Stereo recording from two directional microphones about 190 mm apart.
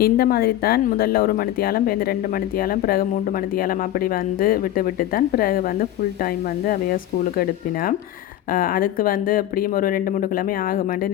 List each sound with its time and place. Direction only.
0.0 s speech: 50° left (ahead or behind)
8.5 s speech: 50° left (ahead or behind)